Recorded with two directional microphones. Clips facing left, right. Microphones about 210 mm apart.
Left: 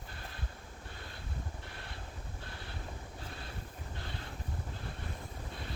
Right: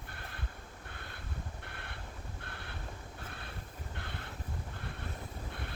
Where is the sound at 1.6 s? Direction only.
60° right (ahead or behind).